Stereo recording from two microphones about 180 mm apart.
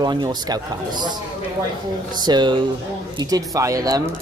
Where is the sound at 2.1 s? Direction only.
25° right (ahead or behind).